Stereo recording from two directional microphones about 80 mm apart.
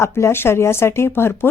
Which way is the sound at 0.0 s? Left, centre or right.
Left.